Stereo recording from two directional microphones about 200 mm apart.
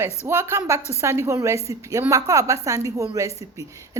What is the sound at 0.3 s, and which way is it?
A woman's voice, 15° right (ahead or behind).